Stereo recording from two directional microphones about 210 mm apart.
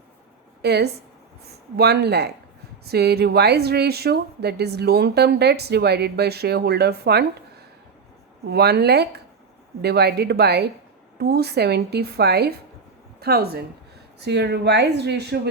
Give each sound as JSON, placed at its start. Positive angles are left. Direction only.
{"t": 0.6, "sound": "a woman's voice", "side_deg": -50}
{"t": 8.4, "sound": "speech", "side_deg": -50}